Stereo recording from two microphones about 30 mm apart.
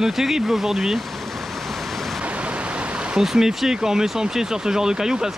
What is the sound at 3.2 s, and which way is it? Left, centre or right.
Speech, centre.